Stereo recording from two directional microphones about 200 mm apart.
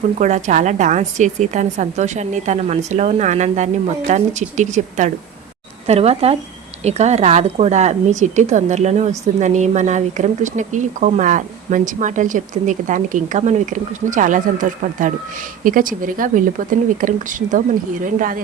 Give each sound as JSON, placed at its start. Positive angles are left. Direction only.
{"t": 0.2, "sound": "a woman's voice", "side_deg": -35}